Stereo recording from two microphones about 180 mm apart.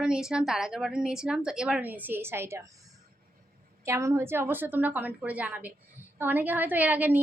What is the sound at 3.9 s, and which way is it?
A woman's voice, 15° right (ahead or behind).